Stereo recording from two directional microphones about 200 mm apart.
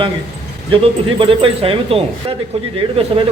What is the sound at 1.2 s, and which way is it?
Speech, 30° right (ahead or behind).